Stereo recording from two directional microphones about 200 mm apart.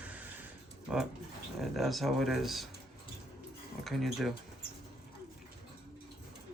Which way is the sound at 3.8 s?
Centre (ahead or behind).